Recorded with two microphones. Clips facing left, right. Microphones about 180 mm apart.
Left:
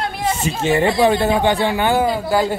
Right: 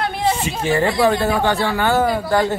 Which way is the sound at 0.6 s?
20° left (ahead or behind).